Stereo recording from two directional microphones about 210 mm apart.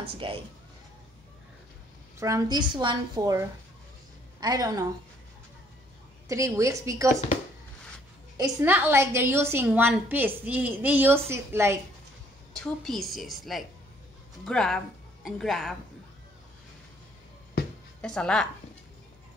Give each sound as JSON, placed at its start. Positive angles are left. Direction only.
{"t": 0.0, "sound": "speech", "side_deg": -25}
{"t": 2.1, "sound": "a woman's voice", "side_deg": -15}
{"t": 6.2, "sound": "a woman's voice", "side_deg": -15}
{"t": 8.4, "sound": "a woman's voice", "side_deg": -10}
{"t": 12.5, "sound": "a woman's voice", "side_deg": 0}
{"t": 17.6, "sound": "music", "side_deg": 45}
{"t": 18.0, "sound": "a woman's voice", "side_deg": 5}